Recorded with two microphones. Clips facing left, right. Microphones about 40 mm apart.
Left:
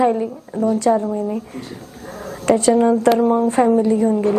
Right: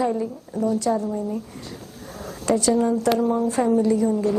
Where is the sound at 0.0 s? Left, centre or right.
Left.